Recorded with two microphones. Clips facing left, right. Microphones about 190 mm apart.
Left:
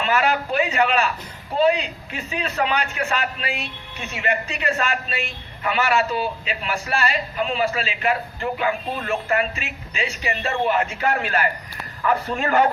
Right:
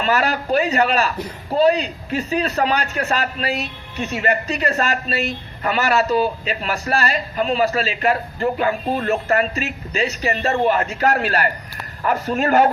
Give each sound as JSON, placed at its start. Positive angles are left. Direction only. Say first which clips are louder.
{"t": 0.0, "sound": "a man's voice", "louder": "right 1 dB", "side_deg": -40}